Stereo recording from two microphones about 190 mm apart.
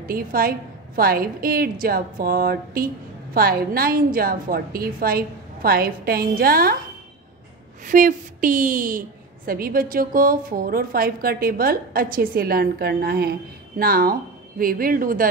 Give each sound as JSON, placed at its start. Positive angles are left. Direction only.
{"t": 0.0, "sound": "a woman's voice", "side_deg": -50}
{"t": 7.8, "sound": "a woman's voice", "side_deg": -45}